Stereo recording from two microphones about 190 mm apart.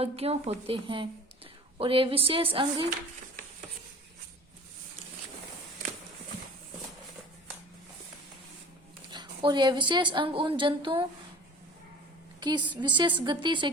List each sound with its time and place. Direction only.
0.0 s a woman's voice: 30° right (ahead or behind)
9.1 s a woman's voice: 25° right (ahead or behind)
12.4 s a woman's voice: 25° right (ahead or behind)